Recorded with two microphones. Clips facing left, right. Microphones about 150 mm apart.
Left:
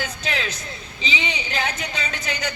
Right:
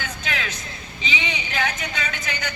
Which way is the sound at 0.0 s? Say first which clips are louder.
Left 2 dB; 35° left (ahead or behind).